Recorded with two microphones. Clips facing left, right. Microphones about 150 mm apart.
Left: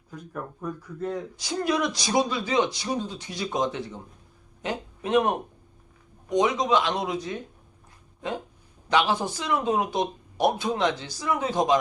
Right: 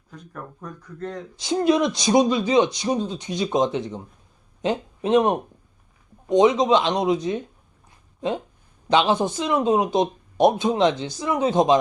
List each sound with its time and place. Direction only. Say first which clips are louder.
0.2 s speech: left 2 dB; 10° left (ahead or behind)
1.4 s speech: right 8 dB; 25° right (ahead or behind)
8.9 s speech: right 4 dB; 20° right (ahead or behind)